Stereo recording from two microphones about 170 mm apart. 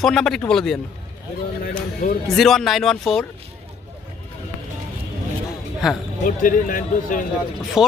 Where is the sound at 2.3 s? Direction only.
Centre (ahead or behind).